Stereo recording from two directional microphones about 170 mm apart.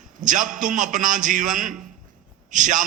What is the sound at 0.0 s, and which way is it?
A man's voice, 50° right (ahead or behind).